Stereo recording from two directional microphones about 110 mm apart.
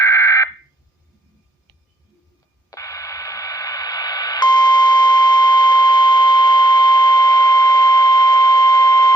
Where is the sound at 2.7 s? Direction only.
30° left (ahead or behind).